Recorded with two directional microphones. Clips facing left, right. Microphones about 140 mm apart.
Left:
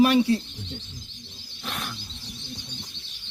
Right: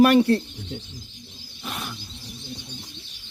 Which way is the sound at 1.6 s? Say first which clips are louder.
Right 1 dB; 5° right (ahead or behind).